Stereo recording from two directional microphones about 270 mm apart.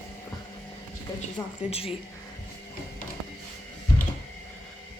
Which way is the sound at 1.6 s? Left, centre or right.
Left.